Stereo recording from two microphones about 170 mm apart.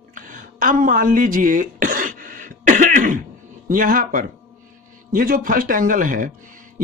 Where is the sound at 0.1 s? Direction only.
50° right (ahead or behind).